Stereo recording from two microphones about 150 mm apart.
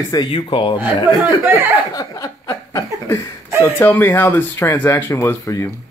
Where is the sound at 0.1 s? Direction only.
30° left (ahead or behind).